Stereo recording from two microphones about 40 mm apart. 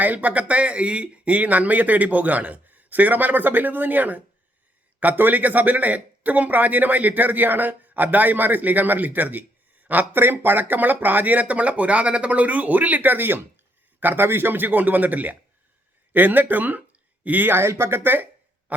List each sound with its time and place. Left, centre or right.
0.0 s speech: right
17.5 s speech: right